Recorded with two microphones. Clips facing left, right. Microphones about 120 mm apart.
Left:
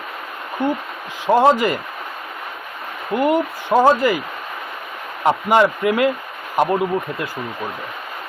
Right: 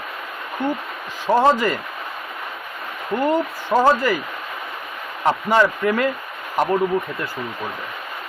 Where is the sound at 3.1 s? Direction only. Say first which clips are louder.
Left 2 dB; 10° left (ahead or behind).